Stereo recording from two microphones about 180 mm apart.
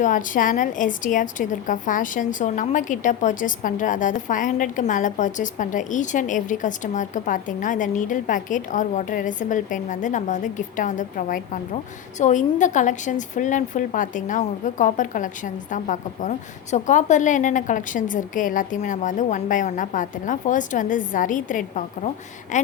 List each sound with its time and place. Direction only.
0.0 s a woman's voice: 45° left (ahead or behind)